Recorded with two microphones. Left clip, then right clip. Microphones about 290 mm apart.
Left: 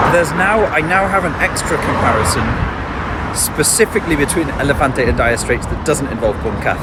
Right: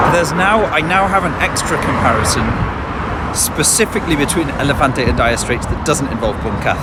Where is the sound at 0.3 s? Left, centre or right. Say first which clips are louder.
Even; centre.